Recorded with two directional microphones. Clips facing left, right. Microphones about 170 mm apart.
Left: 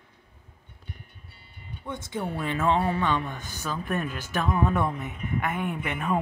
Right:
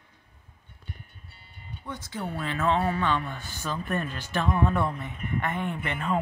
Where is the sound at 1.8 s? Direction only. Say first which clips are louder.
Left 3 dB; 20° left (ahead or behind).